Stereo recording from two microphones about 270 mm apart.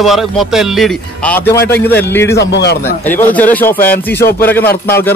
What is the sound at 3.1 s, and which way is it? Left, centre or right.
Music, centre.